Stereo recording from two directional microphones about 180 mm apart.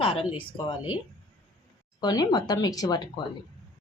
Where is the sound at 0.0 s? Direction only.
30° left (ahead or behind).